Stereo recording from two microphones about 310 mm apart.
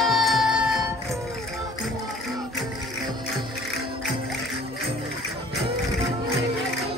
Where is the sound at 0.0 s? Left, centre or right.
Centre.